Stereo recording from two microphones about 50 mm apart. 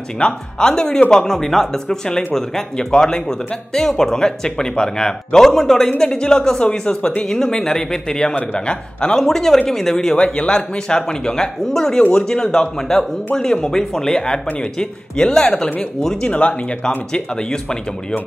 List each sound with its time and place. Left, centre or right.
0.2 s speech: centre
10.1 s speech: left
16.3 s speech: left
17.1 s speech: centre